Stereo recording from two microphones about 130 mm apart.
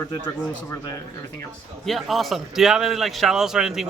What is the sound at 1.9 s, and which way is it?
A man's voice, centre (ahead or behind).